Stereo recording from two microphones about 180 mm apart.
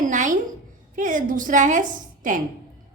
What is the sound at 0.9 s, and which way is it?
A woman's voice, 45° right (ahead or behind).